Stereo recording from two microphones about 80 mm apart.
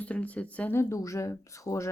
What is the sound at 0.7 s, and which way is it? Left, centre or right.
Speech, left.